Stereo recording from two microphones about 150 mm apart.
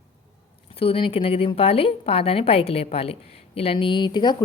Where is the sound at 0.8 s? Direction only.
40° left (ahead or behind).